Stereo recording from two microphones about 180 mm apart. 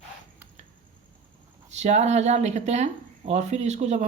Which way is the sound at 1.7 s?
40° right (ahead or behind).